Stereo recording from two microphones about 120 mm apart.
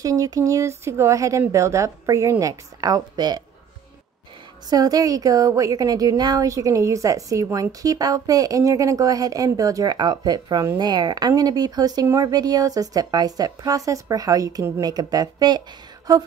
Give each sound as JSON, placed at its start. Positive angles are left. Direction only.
{"t": 0.0, "sound": "speech", "side_deg": -30}
{"t": 4.6, "sound": "speech", "side_deg": -30}